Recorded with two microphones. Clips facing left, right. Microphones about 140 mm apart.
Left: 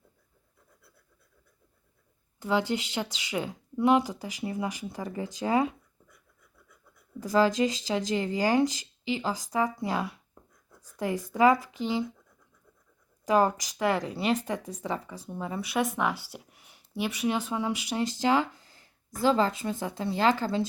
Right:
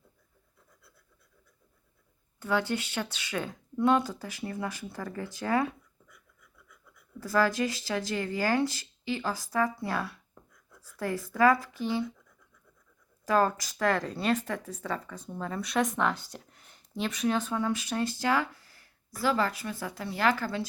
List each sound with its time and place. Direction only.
2.4 s speech: 15° left (ahead or behind)
7.2 s speech: 20° left (ahead or behind)
13.2 s speech: 15° left (ahead or behind)